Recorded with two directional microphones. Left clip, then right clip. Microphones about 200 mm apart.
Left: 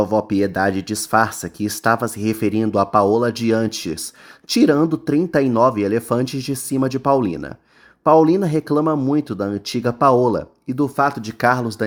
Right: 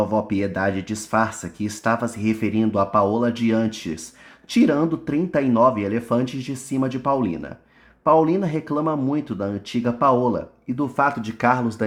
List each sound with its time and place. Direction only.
0.0 s speech: 25° left (ahead or behind)